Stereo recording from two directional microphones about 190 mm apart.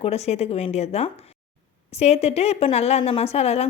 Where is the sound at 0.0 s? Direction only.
35° left (ahead or behind).